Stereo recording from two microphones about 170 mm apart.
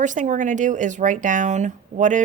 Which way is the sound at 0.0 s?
50° right (ahead or behind).